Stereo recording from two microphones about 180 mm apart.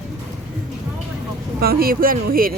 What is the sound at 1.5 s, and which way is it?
Speech, 55° right (ahead or behind).